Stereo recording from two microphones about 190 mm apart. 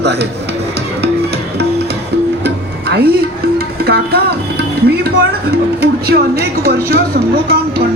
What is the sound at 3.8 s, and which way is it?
Music, 55° right (ahead or behind).